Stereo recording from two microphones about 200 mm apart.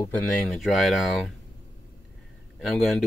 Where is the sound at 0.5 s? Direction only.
Centre (ahead or behind).